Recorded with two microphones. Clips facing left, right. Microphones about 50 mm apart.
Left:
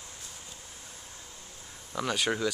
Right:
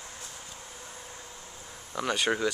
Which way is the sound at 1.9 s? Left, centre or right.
Centre.